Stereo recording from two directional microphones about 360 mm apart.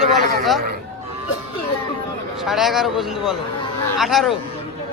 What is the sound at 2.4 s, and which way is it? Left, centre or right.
Speech, centre.